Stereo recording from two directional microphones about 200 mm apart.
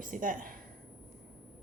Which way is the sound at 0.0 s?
40° right (ahead or behind).